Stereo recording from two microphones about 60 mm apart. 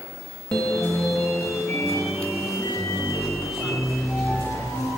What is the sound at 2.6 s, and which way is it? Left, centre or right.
Music, left.